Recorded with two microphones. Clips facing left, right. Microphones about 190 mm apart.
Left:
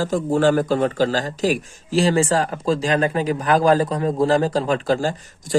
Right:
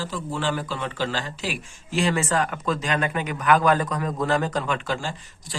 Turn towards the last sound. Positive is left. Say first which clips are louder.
# left 9 dB
turn(degrees=40)  # may be behind; listen again after turning